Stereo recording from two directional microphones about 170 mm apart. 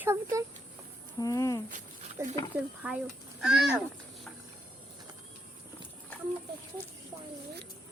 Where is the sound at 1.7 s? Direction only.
50° right (ahead or behind).